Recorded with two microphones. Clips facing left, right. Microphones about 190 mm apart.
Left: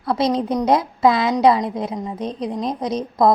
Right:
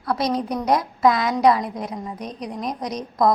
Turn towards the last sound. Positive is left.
turn(degrees=25)  # may be behind; listen again after turning